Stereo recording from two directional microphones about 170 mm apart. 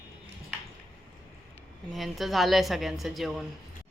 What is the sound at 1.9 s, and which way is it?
Speech, centre (ahead or behind).